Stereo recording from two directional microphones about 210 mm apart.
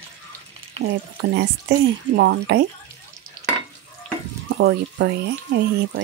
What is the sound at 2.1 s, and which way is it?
Speech, 55° right (ahead or behind).